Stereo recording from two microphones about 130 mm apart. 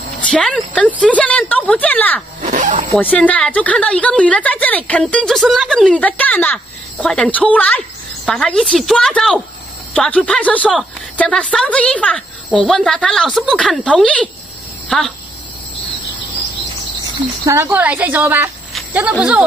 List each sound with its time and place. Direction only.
0.3 s a woman's voice: 5° left (ahead or behind)
2.4 s speech: 70° right (ahead or behind)
3.0 s a woman's voice: 10° left (ahead or behind)
17.5 s a woman's voice: 20° right (ahead or behind)